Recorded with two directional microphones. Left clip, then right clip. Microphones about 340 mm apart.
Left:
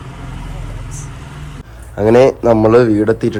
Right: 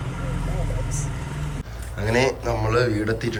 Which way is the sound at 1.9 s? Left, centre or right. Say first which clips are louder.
Left 12 dB; centre.